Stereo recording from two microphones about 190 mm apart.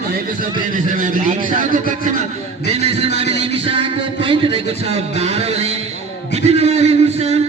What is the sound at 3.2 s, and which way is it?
Music, 30° right (ahead or behind).